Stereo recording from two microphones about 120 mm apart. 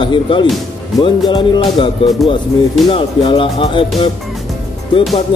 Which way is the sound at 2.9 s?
45° left (ahead or behind).